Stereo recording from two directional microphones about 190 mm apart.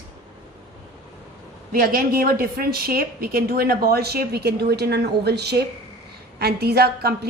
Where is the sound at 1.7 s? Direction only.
50° right (ahead or behind).